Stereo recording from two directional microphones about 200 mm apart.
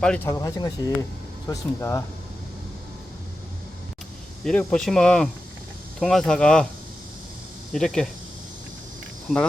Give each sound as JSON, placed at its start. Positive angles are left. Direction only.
{"t": 0.3, "sound": "speech", "side_deg": 15}
{"t": 4.4, "sound": "speech", "side_deg": 5}
{"t": 7.7, "sound": "speech", "side_deg": 0}
{"t": 9.3, "sound": "speech", "side_deg": -5}